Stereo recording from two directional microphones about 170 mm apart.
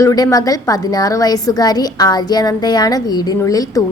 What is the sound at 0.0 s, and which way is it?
A woman's voice, 20° left (ahead or behind).